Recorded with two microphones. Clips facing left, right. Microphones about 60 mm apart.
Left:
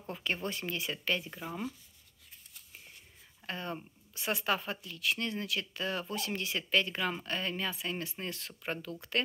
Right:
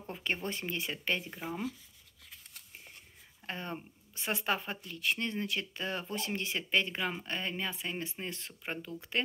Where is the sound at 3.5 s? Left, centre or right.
Right.